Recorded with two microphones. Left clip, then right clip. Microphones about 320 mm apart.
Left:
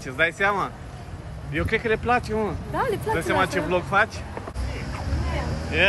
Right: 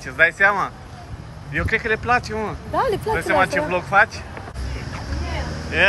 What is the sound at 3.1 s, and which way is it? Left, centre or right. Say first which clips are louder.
Speech: right 5 dB; centre.